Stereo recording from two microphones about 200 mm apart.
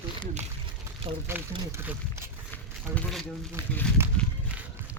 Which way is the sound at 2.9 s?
Centre (ahead or behind).